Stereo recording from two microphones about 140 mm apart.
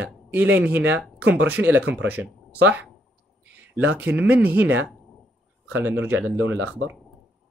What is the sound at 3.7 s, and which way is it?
Speech, 15° right (ahead or behind).